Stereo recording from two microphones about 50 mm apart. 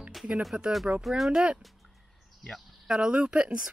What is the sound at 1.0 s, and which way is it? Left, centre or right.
Speech, centre.